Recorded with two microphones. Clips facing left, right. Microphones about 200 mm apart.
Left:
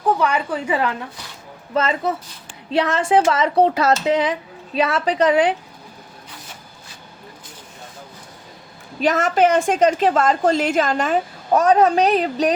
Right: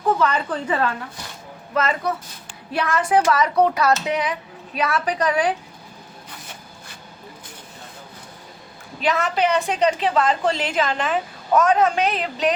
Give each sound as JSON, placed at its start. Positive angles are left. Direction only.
{"t": 0.2, "sound": "a woman's voice", "side_deg": 10}
{"t": 1.7, "sound": "speech", "side_deg": 25}
{"t": 9.0, "sound": "a woman's voice", "side_deg": 45}